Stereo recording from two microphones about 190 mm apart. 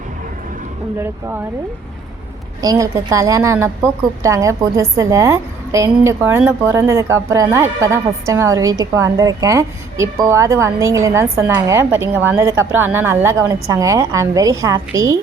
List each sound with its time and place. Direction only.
0.9 s a woman's voice: 10° right (ahead or behind)
2.6 s a woman's voice: 20° right (ahead or behind)